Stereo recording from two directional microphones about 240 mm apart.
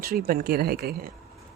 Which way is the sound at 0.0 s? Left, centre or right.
Right.